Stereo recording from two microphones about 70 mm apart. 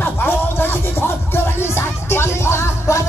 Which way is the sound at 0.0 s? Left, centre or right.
Left.